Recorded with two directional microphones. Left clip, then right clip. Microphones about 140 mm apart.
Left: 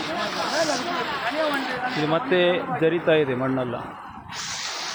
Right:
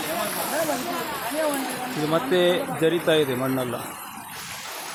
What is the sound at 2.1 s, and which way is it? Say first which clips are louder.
Speech: even; 10° right (ahead or behind).